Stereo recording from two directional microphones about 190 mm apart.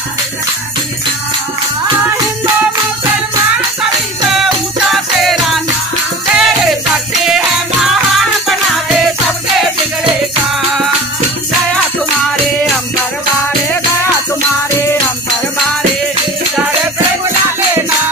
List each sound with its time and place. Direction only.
3.8 s music: centre (ahead or behind)